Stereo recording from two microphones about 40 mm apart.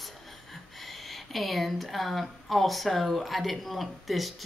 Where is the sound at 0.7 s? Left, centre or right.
Centre.